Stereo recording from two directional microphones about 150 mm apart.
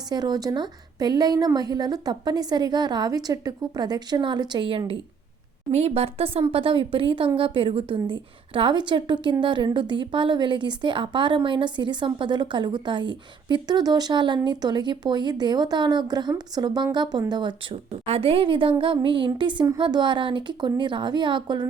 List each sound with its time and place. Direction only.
0.1 s a woman's voice: 25° right (ahead or behind)
18.0 s a woman's voice: 40° right (ahead or behind)